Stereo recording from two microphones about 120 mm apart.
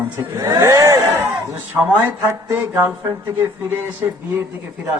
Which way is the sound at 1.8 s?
15° right (ahead or behind).